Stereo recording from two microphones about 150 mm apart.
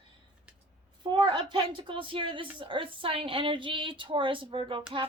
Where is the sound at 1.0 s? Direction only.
30° right (ahead or behind).